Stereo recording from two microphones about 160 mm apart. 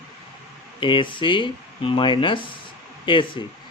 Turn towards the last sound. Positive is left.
turn(degrees=30)  # may be behind; listen again after turning